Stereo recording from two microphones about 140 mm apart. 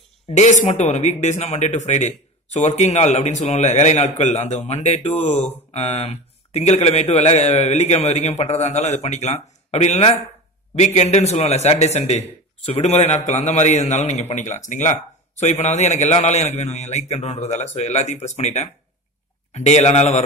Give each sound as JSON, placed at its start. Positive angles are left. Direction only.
{"t": 0.4, "sound": "a man's voice", "side_deg": 55}